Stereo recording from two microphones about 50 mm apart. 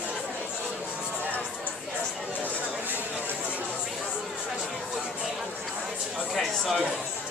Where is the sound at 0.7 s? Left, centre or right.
Right.